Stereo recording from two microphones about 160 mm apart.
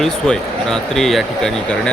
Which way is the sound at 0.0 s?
5° left (ahead or behind).